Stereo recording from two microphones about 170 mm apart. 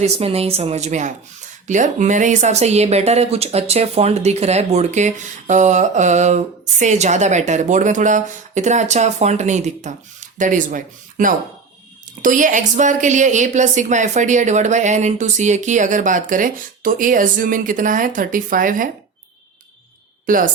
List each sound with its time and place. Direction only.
0.0 s speech: 35° right (ahead or behind); by 18.9 s 55° right (ahead or behind)
20.2 s speech: 50° right (ahead or behind)